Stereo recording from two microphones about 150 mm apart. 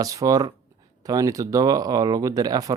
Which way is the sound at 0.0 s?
25° right (ahead or behind).